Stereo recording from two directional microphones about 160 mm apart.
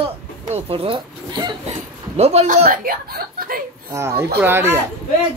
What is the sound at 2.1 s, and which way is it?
Speech, 40° right (ahead or behind).